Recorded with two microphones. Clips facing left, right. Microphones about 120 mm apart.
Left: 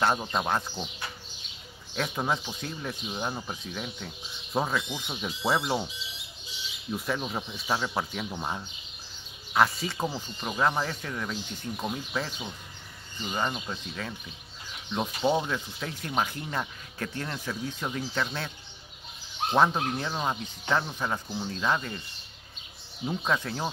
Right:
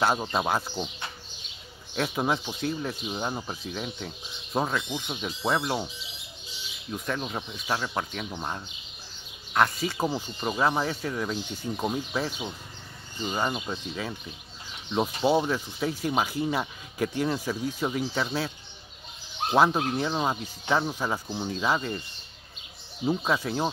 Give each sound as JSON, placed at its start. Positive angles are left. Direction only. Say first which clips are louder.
{"t": 0.3, "sound": "speech", "louder": "right 2 dB", "side_deg": -5}
{"t": 2.0, "sound": "speech", "louder": "right 2 dB", "side_deg": -5}
{"t": 6.9, "sound": "speech", "louder": "even", "side_deg": 5}
{"t": 9.9, "sound": "speech", "louder": "right 3 dB", "side_deg": -10}
{"t": 11.7, "sound": "speech", "louder": "right 3 dB", "side_deg": -15}
{"t": 19.5, "sound": "speech", "louder": "right 2 dB", "side_deg": -5}
{"t": 23.0, "sound": "speech", "louder": "right 3 dB", "side_deg": -5}